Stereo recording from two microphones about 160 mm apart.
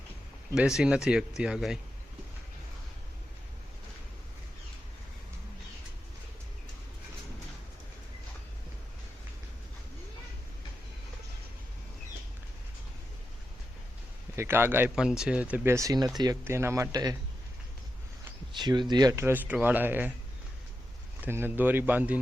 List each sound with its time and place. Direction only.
0.5 s speech: 5° right (ahead or behind)
14.3 s speech: 15° right (ahead or behind)
18.5 s speech: 30° right (ahead or behind); by 20.1 s 10° right (ahead or behind)
21.2 s speech: 15° right (ahead or behind)